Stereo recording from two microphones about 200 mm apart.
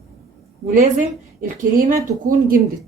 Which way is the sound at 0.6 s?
35° right (ahead or behind).